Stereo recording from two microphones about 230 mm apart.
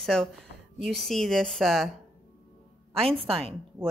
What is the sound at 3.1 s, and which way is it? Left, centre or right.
Speech, right.